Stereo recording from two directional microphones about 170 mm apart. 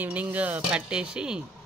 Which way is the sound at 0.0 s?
10° right (ahead or behind).